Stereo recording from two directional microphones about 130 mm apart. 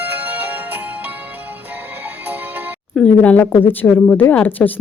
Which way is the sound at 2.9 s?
10° left (ahead or behind).